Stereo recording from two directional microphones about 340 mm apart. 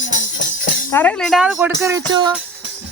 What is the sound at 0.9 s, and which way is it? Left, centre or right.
A woman's voice, centre.